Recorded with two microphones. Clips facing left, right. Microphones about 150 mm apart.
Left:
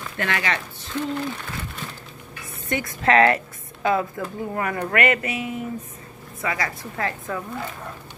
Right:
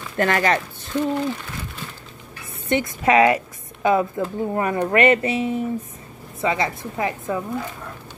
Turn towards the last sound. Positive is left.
turn(degrees=-15)  # may be behind; listen again after turning